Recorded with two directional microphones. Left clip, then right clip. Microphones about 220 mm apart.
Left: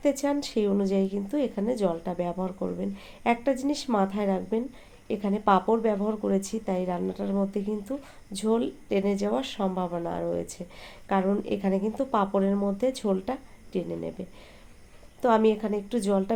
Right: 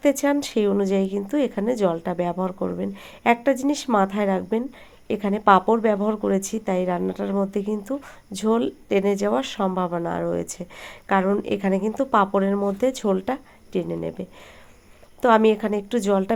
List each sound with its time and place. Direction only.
0.0 s speech: 25° right (ahead or behind)